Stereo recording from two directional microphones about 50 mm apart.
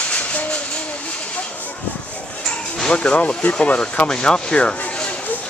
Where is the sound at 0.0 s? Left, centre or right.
Left.